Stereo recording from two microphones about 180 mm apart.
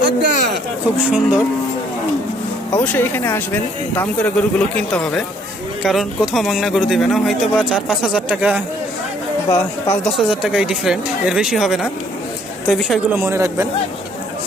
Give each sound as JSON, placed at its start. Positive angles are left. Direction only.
{"t": 0.0, "sound": "a sound", "side_deg": -65}
{"t": 1.0, "sound": "speech", "side_deg": -10}
{"t": 2.7, "sound": "speech", "side_deg": 10}
{"t": 10.0, "sound": "speech", "side_deg": 0}